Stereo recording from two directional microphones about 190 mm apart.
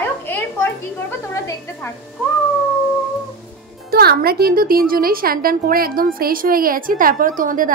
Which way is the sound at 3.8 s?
55° right (ahead or behind).